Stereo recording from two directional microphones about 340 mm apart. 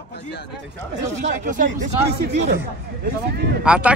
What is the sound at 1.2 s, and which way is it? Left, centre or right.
Speech, right.